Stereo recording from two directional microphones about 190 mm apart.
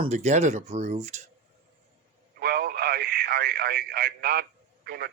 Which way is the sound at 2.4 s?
55° right (ahead or behind).